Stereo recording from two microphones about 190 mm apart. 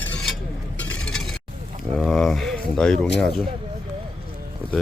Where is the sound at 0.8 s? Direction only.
5° left (ahead or behind).